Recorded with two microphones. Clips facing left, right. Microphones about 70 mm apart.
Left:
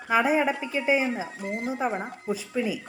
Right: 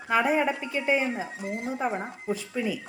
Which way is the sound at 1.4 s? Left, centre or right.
Left.